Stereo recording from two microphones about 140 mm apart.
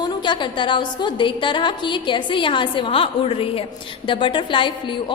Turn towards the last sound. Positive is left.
turn(degrees=35)  # may be behind; listen again after turning